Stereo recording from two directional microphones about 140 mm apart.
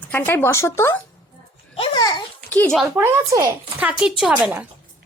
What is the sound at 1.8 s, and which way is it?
Babbling, 30° left (ahead or behind).